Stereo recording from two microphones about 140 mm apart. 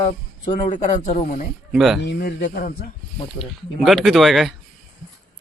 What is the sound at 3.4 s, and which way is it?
Speech, centre (ahead or behind).